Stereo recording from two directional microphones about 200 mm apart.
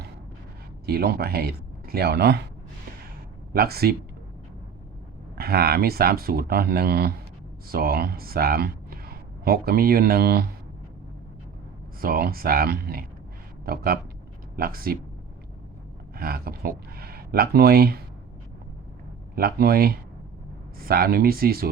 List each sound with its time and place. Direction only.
0.9 s speech: 50° right (ahead or behind)
3.5 s speech: 50° right (ahead or behind)
5.4 s speech: 50° right (ahead or behind)
11.9 s speech: 45° right (ahead or behind)
16.1 s speech: 50° right (ahead or behind)
19.4 s speech: 50° right (ahead or behind)